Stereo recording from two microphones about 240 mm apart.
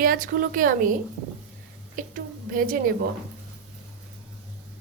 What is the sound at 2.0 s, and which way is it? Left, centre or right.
Speech, right.